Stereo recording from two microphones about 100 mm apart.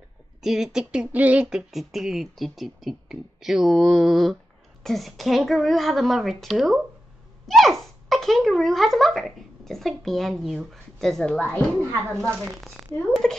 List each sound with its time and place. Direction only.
0.4 s speech: 5° right (ahead or behind); by 11.6 s 15° left (ahead or behind)
11.8 s speech: 25° right (ahead or behind)
12.6 s speech: 5° left (ahead or behind)